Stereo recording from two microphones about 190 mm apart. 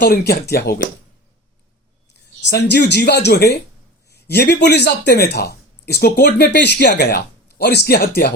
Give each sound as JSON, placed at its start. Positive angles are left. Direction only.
{"t": 0.0, "sound": "speech", "side_deg": 60}
{"t": 2.4, "sound": "speech", "side_deg": 65}